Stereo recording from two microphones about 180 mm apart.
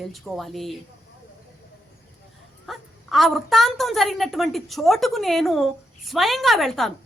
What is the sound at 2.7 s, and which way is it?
A woman's voice, centre (ahead or behind).